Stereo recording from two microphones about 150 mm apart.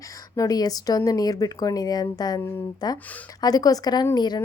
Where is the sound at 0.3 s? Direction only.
25° left (ahead or behind).